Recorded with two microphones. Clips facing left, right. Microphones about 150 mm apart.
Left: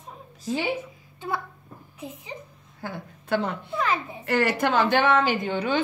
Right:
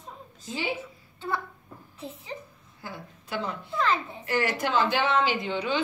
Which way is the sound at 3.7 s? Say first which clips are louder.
Right 1 dB; 10° left (ahead or behind).